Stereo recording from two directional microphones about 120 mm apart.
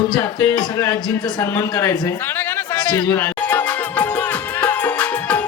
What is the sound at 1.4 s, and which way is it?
A man's voice, 30° left (ahead or behind).